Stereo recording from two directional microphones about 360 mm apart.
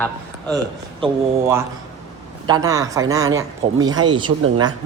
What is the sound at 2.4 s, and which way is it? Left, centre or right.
Speech, centre.